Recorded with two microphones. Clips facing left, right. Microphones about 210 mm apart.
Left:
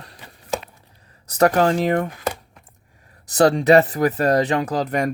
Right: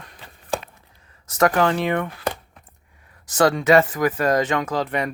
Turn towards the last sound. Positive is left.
turn(degrees=40)  # may be behind; listen again after turning